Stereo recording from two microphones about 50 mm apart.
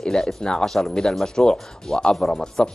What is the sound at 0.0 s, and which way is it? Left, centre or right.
A man's voice, centre.